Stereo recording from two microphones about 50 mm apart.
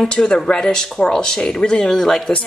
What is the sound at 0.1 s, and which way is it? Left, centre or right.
A woman's voice, centre.